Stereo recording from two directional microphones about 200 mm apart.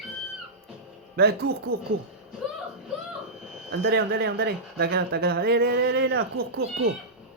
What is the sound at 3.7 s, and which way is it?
Speech, 55° right (ahead or behind).